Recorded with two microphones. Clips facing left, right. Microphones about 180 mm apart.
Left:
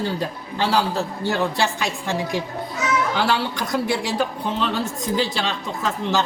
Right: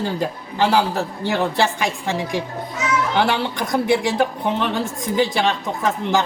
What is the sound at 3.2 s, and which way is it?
A man's voice, 20° right (ahead or behind).